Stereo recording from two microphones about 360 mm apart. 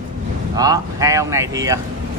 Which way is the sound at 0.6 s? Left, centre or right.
Centre.